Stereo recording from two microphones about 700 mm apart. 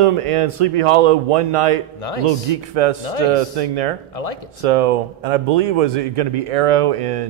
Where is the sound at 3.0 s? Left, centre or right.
Left.